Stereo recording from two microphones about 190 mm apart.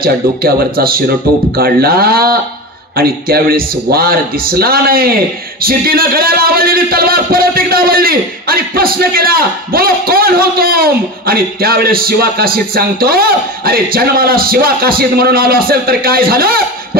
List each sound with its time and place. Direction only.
0.0 s speech: 50° right (ahead or behind)